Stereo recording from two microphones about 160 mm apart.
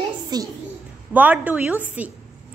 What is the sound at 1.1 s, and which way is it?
A woman's voice, 10° right (ahead or behind).